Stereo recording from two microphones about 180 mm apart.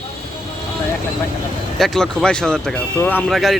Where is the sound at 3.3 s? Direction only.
Centre (ahead or behind).